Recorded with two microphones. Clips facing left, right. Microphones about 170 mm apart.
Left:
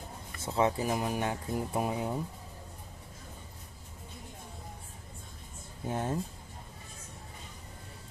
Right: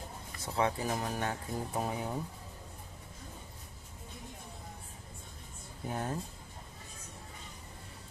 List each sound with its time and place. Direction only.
0.4 s speech: 20° left (ahead or behind)
5.9 s speech: 25° left (ahead or behind)